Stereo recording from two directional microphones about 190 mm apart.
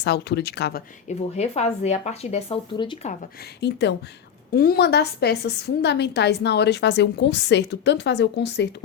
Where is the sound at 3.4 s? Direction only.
65° left (ahead or behind).